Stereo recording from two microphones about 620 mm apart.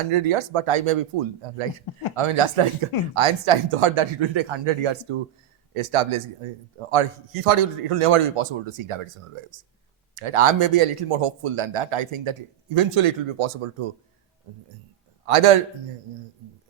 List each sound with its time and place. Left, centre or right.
0.1 s speech: right
15.3 s speech: right